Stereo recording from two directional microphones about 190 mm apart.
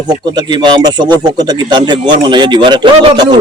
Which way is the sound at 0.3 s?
20° right (ahead or behind).